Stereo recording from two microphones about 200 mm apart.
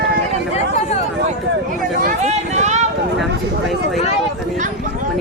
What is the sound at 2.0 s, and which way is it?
Speech, 40° right (ahead or behind).